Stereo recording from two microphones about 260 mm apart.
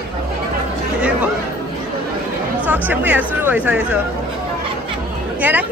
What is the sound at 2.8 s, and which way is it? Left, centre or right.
Speech, centre.